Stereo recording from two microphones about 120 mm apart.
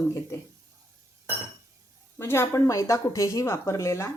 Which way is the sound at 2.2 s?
20° left (ahead or behind).